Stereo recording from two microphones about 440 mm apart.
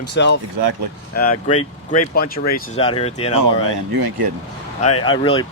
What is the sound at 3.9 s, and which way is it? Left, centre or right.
Speech, right.